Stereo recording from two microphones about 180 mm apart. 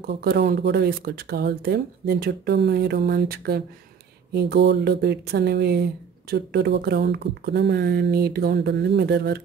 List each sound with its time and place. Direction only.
0.0 s speech: 60° right (ahead or behind)